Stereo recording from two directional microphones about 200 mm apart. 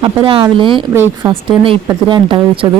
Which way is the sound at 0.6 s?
25° right (ahead or behind).